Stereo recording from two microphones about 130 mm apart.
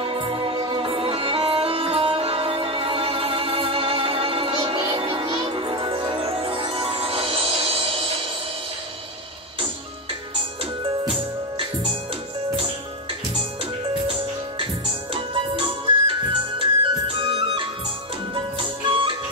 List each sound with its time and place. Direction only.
0.0 s music: 40° right (ahead or behind)
10.6 s music: 40° right (ahead or behind)
15.1 s music: 40° right (ahead or behind)